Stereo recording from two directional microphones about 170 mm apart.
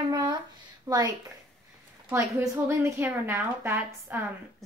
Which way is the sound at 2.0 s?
15° right (ahead or behind).